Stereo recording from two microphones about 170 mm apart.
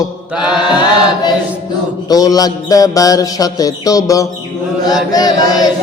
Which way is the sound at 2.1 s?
20° left (ahead or behind).